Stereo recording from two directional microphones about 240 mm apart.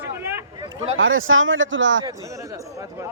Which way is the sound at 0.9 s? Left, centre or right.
Right.